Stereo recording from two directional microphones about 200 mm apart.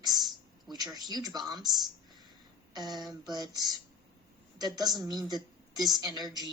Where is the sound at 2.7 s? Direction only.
20° right (ahead or behind).